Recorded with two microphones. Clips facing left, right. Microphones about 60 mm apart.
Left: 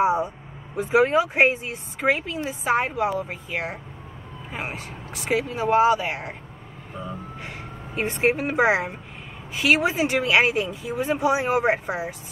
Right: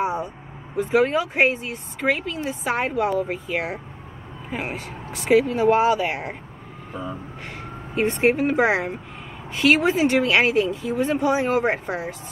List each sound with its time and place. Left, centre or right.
0.0 s vehicle: centre
0.7 s speech: centre
2.6 s speech: centre
7.4 s speech: centre